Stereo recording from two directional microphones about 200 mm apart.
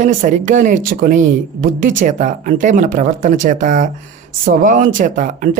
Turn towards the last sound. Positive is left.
turn(degrees=-40)  # may be behind; listen again after turning